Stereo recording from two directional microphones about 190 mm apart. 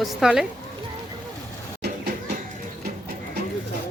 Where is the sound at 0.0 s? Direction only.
Centre (ahead or behind).